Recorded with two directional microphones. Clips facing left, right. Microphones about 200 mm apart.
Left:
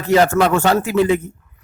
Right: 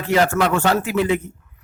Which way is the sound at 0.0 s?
40° left (ahead or behind).